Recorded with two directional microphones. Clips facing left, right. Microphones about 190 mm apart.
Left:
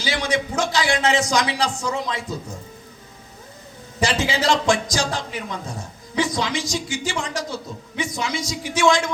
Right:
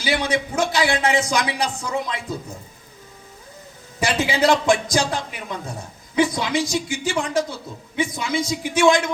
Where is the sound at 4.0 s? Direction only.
55° right (ahead or behind).